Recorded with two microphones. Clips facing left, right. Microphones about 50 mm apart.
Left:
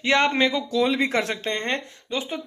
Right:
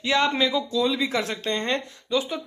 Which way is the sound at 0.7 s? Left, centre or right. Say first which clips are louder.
Left 2 dB; left.